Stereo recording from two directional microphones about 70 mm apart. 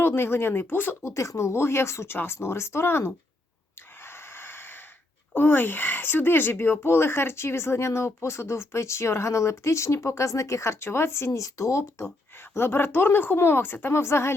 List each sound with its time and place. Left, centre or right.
0.0 s speech: left
1.1 s speech: left
4.0 s a sound: left
5.3 s speech: left
11.3 s speech: left
11.8 s speech: left